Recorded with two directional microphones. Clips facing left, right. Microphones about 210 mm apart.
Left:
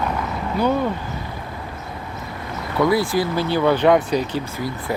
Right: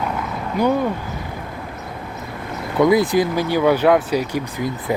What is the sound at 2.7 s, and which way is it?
Speech, 20° right (ahead or behind).